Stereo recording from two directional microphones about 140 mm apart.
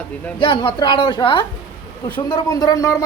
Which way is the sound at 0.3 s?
35° left (ahead or behind).